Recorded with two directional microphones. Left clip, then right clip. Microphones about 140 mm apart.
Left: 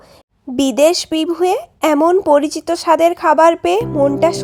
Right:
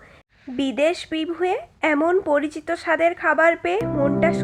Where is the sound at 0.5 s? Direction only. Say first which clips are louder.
Left 9 dB; 65° left (ahead or behind).